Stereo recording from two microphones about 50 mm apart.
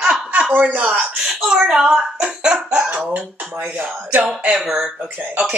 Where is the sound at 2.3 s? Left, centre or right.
Centre.